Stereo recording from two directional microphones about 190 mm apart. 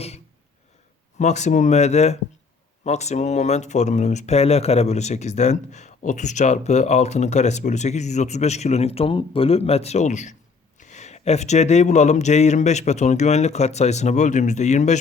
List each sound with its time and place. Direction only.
1.2 s speech: 40° left (ahead or behind)